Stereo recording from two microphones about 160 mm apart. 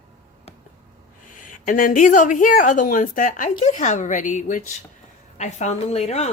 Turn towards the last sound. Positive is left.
turn(degrees=40)  # may be behind; listen again after turning